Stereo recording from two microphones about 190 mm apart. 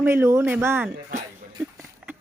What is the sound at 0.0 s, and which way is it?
Speech, 15° right (ahead or behind).